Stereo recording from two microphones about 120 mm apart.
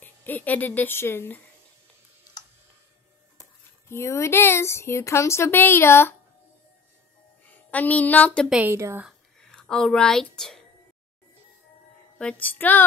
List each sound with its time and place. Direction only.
0.0 s speech: 15° left (ahead or behind)
3.9 s speech: 20° left (ahead or behind)
7.4 s a woman's voice: 15° left (ahead or behind)
8.5 s a woman's voice: 10° right (ahead or behind)
8.7 s a woman's voice: 25° right (ahead or behind)
9.4 s a woman's voice: 5° left (ahead or behind)
12.2 s a sound: 10° left (ahead or behind)